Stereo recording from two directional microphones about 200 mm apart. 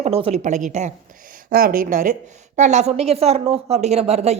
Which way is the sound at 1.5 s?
45° right (ahead or behind).